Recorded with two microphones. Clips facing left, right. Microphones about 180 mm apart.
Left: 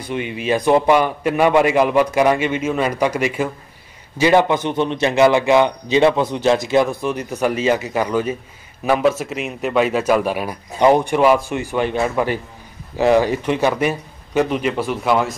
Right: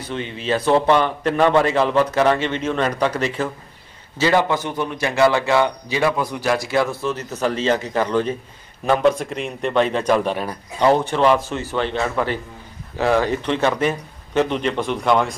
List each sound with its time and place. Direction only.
0.0 s a man's voice: 15° left (ahead or behind)